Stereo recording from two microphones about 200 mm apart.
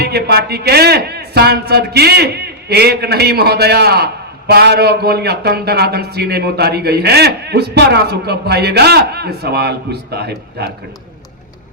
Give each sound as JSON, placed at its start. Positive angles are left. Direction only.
{"t": 0.0, "sound": "a man's voice", "side_deg": -55}